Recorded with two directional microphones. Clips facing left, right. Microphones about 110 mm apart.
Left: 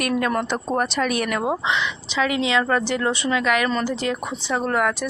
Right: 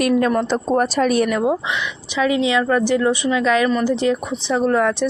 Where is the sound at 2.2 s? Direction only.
20° right (ahead or behind).